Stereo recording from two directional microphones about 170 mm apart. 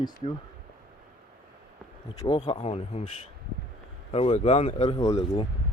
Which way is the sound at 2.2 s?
35° left (ahead or behind).